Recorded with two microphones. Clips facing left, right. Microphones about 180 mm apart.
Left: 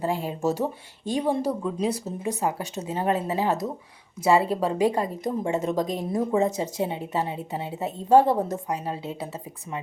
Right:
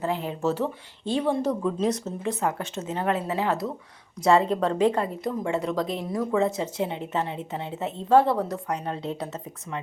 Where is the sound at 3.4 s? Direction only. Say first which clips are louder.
Left 1 dB; 40° left (ahead or behind).